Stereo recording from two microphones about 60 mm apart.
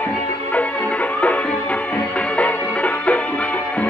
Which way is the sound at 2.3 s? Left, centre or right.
Left.